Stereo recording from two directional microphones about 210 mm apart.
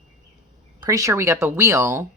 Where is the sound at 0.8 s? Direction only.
15° right (ahead or behind).